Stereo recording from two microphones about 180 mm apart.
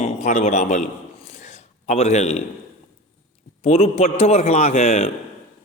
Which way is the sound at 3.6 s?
35° left (ahead or behind).